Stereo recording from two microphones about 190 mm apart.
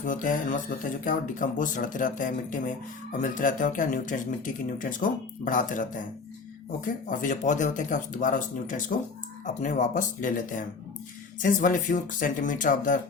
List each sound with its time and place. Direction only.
0.0 s speech: 45° left (ahead or behind)